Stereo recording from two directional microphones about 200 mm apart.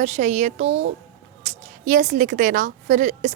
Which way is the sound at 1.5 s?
40° right (ahead or behind).